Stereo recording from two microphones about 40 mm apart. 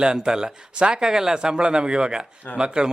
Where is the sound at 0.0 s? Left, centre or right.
Centre.